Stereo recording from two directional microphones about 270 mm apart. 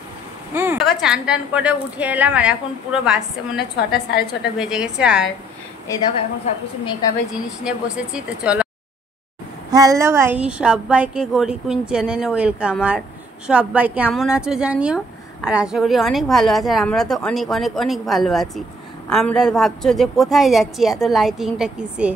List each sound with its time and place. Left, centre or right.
0.6 s speech: centre
3.5 s a woman's voice: left
4.6 s speech: centre
7.6 s speech: centre
9.7 s speech: centre